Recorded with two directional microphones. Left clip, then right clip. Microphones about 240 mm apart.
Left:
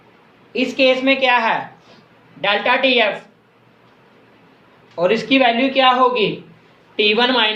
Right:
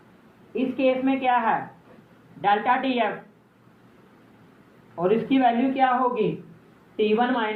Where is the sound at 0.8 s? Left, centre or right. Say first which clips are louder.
Left 9 dB; left.